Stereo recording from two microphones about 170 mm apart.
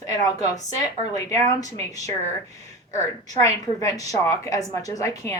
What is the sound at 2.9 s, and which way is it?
Speech, 20° left (ahead or behind).